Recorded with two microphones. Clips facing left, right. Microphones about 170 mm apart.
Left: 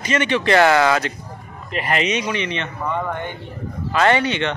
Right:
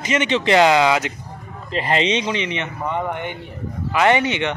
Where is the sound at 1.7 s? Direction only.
30° right (ahead or behind).